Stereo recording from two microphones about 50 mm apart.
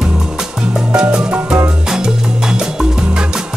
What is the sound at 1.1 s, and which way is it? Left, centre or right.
Music, centre.